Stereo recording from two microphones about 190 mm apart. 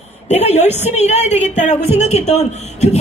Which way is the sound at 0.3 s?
35° left (ahead or behind).